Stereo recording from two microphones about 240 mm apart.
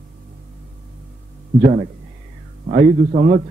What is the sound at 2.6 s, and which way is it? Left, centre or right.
Speech, right.